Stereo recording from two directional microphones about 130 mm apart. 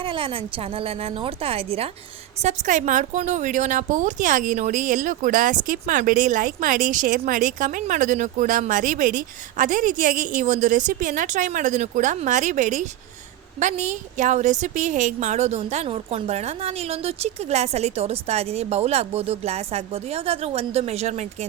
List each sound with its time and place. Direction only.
0.0 s a woman's voice: 40° right (ahead or behind)
2.4 s a woman's voice: 65° right (ahead or behind)